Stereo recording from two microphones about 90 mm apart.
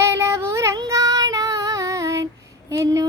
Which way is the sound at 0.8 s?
40° right (ahead or behind).